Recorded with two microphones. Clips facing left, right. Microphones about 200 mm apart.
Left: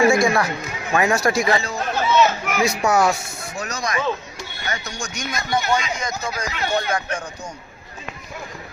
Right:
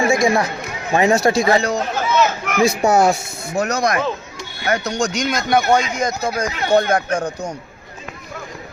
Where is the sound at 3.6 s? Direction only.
60° right (ahead or behind).